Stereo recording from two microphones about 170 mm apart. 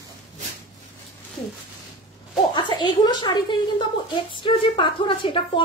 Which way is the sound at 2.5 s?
25° left (ahead or behind).